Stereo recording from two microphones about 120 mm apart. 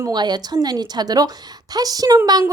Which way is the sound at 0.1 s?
35° right (ahead or behind).